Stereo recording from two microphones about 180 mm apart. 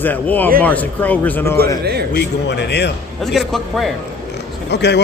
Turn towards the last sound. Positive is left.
turn(degrees=70)  # may be behind; listen again after turning